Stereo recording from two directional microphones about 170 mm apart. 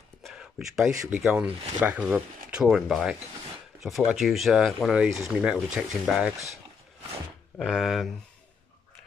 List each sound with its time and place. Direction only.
0.2 s a sound: 5° right (ahead or behind)
1.2 s speech: 5° right (ahead or behind)
7.5 s speech: centre (ahead or behind)